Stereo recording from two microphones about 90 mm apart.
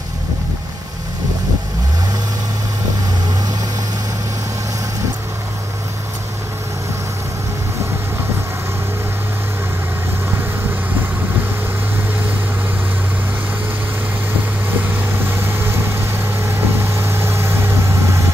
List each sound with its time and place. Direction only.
15.2 s vehicle: 25° right (ahead or behind)